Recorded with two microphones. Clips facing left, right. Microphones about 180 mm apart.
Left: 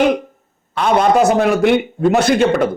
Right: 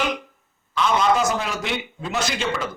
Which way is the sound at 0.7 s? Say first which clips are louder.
Left 6 dB; 55° left (ahead or behind).